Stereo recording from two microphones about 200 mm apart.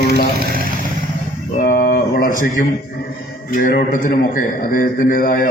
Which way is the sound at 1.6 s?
40° left (ahead or behind).